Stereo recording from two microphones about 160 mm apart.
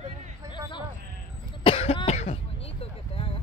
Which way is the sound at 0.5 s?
30° left (ahead or behind).